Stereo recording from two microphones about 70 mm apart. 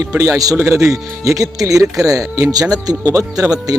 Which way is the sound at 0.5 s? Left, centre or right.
Right.